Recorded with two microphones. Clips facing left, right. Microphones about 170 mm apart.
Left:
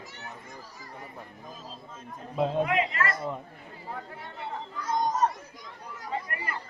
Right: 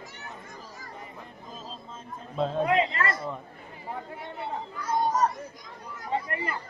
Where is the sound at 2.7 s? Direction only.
30° right (ahead or behind).